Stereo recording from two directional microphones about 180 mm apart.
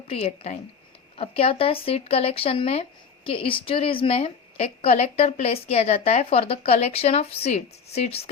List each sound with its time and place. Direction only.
0.1 s a woman's voice: 35° left (ahead or behind)